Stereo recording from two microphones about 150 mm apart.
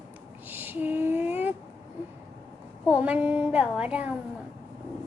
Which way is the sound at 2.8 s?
10° right (ahead or behind).